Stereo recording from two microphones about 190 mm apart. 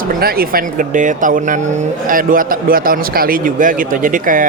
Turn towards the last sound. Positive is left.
turn(degrees=-45)  # may be behind; listen again after turning